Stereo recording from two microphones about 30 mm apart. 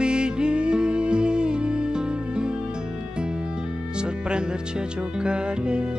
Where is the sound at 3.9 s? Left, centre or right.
Right.